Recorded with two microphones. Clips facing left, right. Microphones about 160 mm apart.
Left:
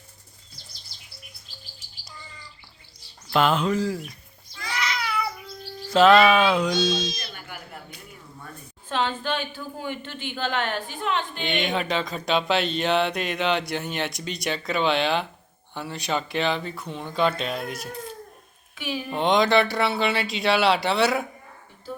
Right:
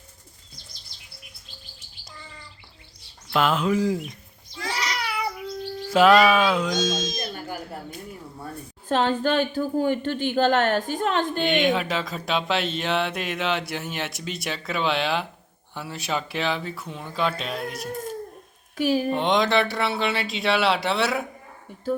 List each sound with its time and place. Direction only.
3.2 s speech: centre (ahead or behind)
3.8 s speech: 15° right (ahead or behind)
4.6 s a sound: 35° right (ahead or behind)
5.9 s speech: 10° right (ahead or behind)
6.7 s a woman's voice: 45° right (ahead or behind)
11.6 s speech: centre (ahead or behind)
17.9 s a sound: 45° right (ahead or behind)
18.8 s speech: 40° right (ahead or behind)
19.1 s speech: centre (ahead or behind)